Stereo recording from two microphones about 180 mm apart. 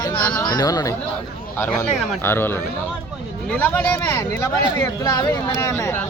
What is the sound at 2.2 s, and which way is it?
Speech, 10° left (ahead or behind).